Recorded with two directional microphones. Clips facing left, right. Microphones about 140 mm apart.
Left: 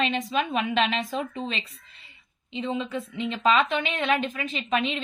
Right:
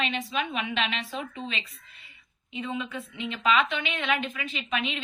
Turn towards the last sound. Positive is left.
turn(degrees=35)  # may be behind; listen again after turning